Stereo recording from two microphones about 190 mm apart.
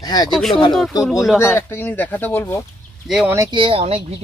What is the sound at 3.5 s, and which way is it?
Speech, 30° right (ahead or behind).